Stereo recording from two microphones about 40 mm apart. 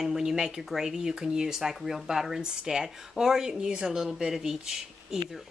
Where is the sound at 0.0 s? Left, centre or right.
Centre.